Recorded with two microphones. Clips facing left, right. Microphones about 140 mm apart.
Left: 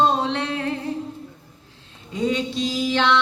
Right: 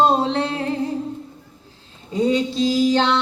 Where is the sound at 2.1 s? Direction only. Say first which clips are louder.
Right 4 dB; 35° right (ahead or behind).